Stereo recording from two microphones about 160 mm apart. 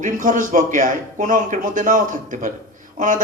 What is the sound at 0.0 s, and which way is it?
A man's voice, 55° right (ahead or behind).